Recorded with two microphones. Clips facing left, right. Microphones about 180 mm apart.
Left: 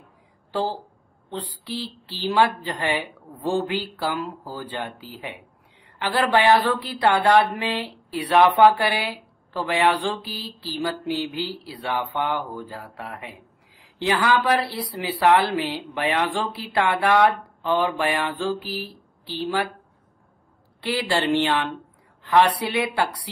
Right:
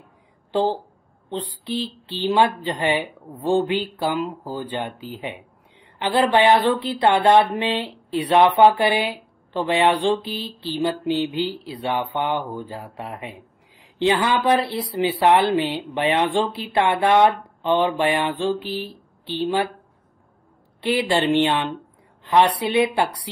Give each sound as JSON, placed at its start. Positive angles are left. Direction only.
{"t": 0.5, "sound": "speech", "side_deg": -25}
{"t": 20.8, "sound": "speech", "side_deg": -20}